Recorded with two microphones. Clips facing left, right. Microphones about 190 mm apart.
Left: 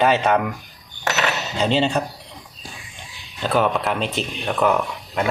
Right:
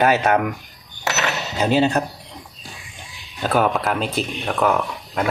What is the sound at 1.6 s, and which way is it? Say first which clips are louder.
Speech: right 2 dB; 5° right (ahead or behind).